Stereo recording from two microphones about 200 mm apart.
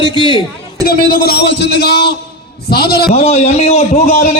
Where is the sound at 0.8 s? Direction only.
50° left (ahead or behind).